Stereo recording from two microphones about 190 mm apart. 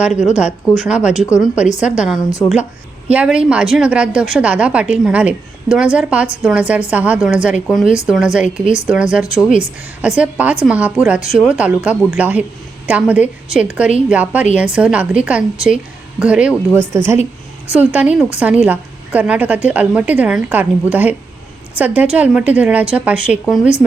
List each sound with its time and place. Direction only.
0.0 s a woman's voice: 5° right (ahead or behind)
2.4 s speech: 15° left (ahead or behind)
3.1 s a woman's voice: 5° right (ahead or behind)